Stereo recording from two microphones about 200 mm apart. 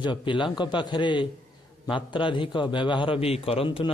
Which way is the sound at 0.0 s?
25° left (ahead or behind).